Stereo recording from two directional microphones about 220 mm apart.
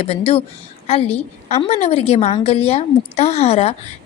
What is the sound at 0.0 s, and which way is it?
A woman's voice, 25° left (ahead or behind).